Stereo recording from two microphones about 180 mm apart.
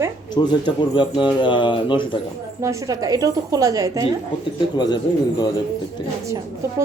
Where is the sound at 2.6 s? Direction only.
20° right (ahead or behind).